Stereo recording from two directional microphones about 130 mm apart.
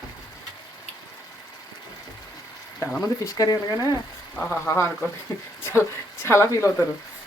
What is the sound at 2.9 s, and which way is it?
Speech, 25° left (ahead or behind).